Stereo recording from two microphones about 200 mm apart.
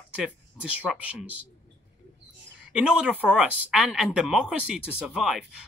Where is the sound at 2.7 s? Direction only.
5° right (ahead or behind).